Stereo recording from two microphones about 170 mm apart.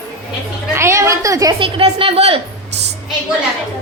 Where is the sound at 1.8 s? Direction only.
35° right (ahead or behind).